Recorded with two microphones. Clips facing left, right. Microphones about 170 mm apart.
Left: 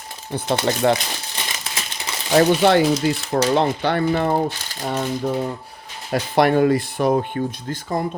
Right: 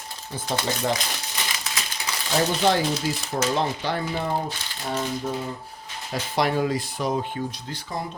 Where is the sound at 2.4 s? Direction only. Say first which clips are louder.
Left 7 dB; 65° left (ahead or behind).